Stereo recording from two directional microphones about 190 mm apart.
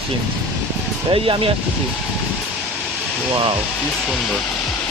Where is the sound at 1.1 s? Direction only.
25° right (ahead or behind).